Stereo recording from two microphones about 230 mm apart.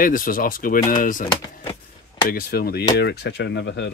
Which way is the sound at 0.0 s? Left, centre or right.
Left.